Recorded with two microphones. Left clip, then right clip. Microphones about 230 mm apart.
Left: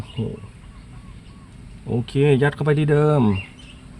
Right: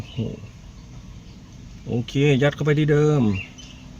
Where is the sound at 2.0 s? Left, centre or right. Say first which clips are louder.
Left 2 dB; left.